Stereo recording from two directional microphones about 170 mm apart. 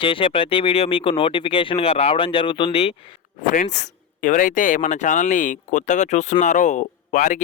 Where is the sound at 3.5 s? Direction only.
45° left (ahead or behind).